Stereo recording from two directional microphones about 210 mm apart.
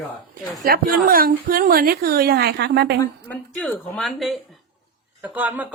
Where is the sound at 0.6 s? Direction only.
45° right (ahead or behind).